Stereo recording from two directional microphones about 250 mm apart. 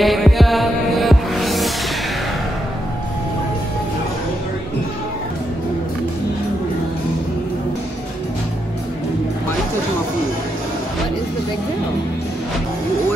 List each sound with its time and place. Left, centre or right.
0.0 s music: centre